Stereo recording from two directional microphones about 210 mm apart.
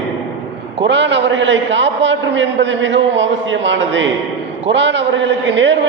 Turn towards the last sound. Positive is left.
turn(degrees=-60)  # may be behind; listen again after turning